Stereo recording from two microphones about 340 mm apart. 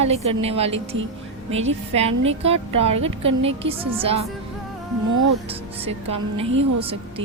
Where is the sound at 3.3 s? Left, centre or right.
Right.